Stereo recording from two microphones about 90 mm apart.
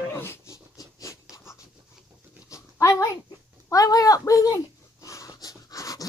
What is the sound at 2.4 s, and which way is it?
Dog, 35° left (ahead or behind).